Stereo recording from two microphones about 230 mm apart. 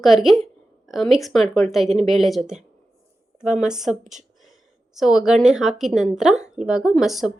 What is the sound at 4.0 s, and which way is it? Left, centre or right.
Speech, right.